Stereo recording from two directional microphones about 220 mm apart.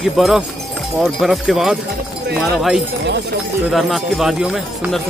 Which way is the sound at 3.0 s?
45° right (ahead or behind).